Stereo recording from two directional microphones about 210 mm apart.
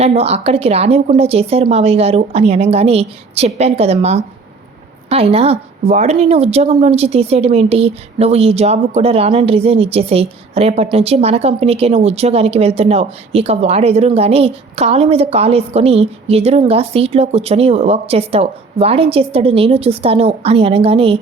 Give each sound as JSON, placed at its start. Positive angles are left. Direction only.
{"t": 0.0, "sound": "speech", "side_deg": -30}